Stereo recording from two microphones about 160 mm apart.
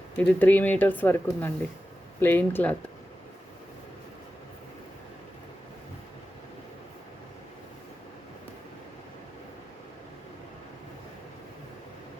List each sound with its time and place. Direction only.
0.2 s speech: 10° left (ahead or behind)